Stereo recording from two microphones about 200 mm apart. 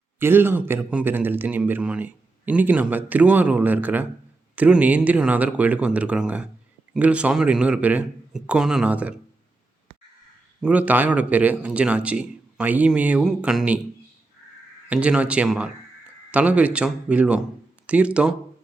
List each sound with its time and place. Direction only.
0.2 s a man's voice: 10° right (ahead or behind)
10.6 s a man's voice: 5° right (ahead or behind)
14.8 s a man's voice: 5° right (ahead or behind)